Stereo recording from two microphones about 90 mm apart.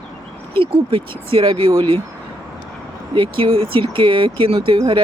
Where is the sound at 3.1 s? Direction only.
70° right (ahead or behind).